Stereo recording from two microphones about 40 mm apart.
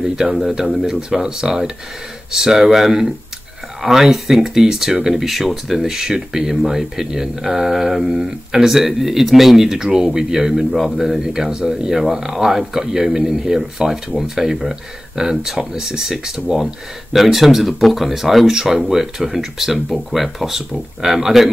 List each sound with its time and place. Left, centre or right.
0.0 s speech: centre
17.1 s speech: centre